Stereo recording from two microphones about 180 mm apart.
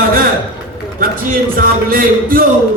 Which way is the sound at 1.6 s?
50° right (ahead or behind).